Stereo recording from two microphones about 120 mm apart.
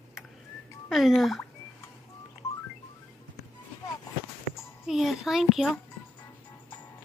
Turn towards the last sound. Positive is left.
turn(degrees=-5)  # may be behind; listen again after turning